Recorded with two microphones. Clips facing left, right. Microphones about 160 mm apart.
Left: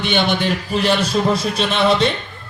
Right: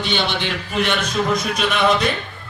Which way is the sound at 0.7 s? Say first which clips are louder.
Left 3 dB; 35° left (ahead or behind).